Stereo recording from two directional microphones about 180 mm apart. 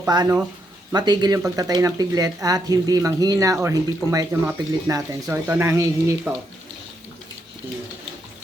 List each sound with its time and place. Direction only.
0.1 s speech: 20° right (ahead or behind)